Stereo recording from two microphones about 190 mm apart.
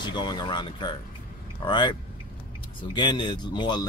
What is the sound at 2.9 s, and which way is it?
Speech, 25° left (ahead or behind).